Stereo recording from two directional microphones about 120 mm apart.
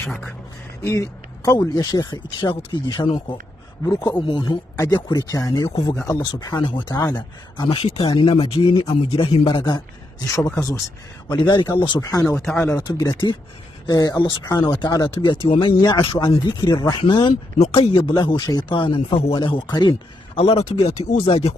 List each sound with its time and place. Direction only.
0.8 s speech: 25° left (ahead or behind)
3.8 s speech: 20° left (ahead or behind)
4.3 s speech: 35° left (ahead or behind)
10.2 s speech: 25° left (ahead or behind)
11.3 s speech: 40° left (ahead or behind)
12.0 s speech: 25° left (ahead or behind)
12.8 s speech: 35° left (ahead or behind)
15.3 s speech: 50° left (ahead or behind)
20.3 s speech: 60° left (ahead or behind)